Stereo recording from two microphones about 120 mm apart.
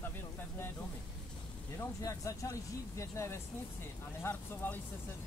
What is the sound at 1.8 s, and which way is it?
Speech, 25° left (ahead or behind).